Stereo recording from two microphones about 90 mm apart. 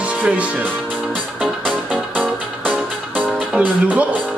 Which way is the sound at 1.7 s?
15° right (ahead or behind).